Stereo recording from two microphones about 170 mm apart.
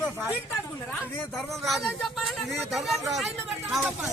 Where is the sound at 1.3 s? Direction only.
Centre (ahead or behind).